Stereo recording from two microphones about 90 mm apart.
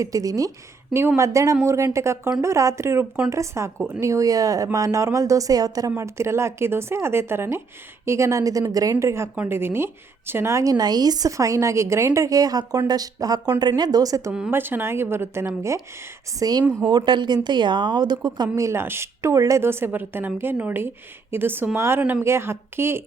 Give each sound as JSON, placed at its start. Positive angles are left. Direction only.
{"t": 0.0, "sound": "a woman's voice", "side_deg": -40}
{"t": 0.9, "sound": "a woman's voice", "side_deg": -30}
{"t": 6.0, "sound": "a woman's voice", "side_deg": -30}
{"t": 14.5, "sound": "a woman's voice", "side_deg": -25}
{"t": 16.4, "sound": "a woman's voice", "side_deg": -45}
{"t": 18.5, "sound": "a woman's voice", "side_deg": -30}